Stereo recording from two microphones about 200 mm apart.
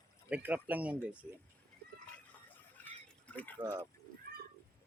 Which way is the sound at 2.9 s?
10° left (ahead or behind).